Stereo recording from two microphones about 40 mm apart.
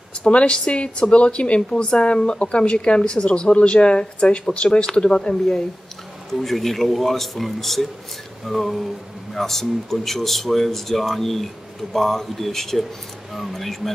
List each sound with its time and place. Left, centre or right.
0.2 s speech: left
6.3 s speech: centre